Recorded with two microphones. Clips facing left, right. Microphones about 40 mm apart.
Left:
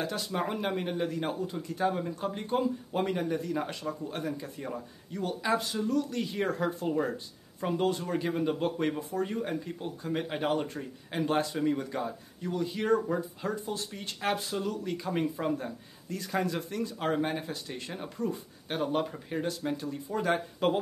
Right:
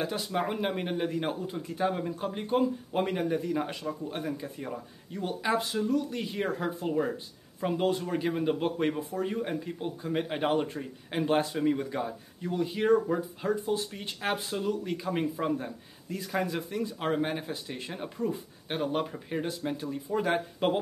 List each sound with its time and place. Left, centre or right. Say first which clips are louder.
0.0 s speech: right 2 dB; centre